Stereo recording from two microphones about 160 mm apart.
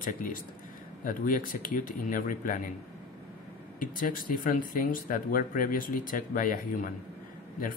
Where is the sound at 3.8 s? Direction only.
60° left (ahead or behind).